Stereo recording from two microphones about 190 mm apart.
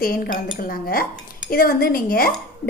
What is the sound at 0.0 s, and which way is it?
A woman's voice, 50° left (ahead or behind).